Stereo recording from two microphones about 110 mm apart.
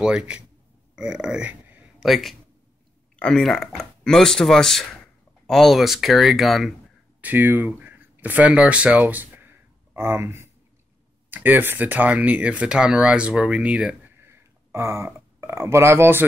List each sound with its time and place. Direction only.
0.0 s speech: 10° right (ahead or behind)
0.9 s a sound: 5° right (ahead or behind)
2.0 s speech: centre (ahead or behind)
7.2 s speech: 15° right (ahead or behind)